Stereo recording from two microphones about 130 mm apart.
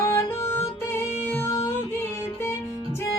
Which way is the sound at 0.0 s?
20° left (ahead or behind).